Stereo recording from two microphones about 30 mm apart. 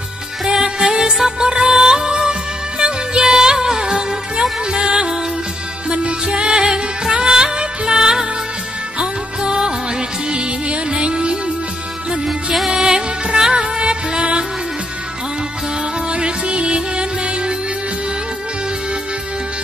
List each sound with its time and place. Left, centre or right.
0.5 s music: right
12.7 s music: right
13.5 s music: right
16.1 s music: right